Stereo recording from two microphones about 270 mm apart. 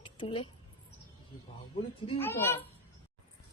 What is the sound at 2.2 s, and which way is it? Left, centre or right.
Speech, centre.